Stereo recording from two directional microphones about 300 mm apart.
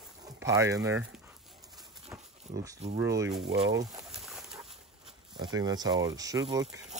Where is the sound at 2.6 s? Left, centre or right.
Centre.